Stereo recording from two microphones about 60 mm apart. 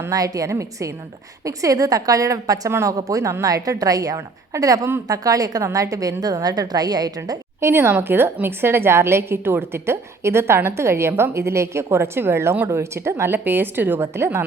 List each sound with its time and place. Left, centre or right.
0.1 s a woman's voice: right
0.5 s a woman's voice: right
1.5 s a woman's voice: right
3.4 s a woman's voice: right
4.5 s a woman's voice: right
5.6 s a woman's voice: right
7.6 s a woman's voice: right